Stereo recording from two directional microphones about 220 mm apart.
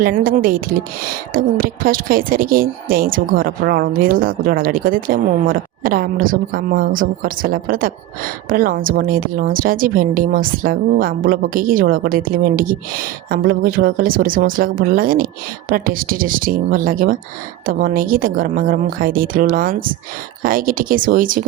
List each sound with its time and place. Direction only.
0.0 s speech: 40° right (ahead or behind)